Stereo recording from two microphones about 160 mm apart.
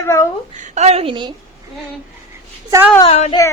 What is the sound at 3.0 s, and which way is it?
Speech, 40° left (ahead or behind).